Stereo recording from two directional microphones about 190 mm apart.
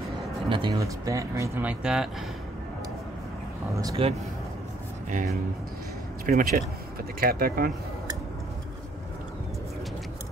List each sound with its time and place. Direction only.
0.5 s speech: 25° right (ahead or behind); by 2.0 s 5° right (ahead or behind)
4.0 s speech: 30° right (ahead or behind)
6.2 s speech: 50° right (ahead or behind)